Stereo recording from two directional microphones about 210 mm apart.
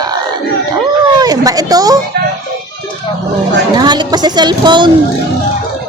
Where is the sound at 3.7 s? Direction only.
20° right (ahead or behind).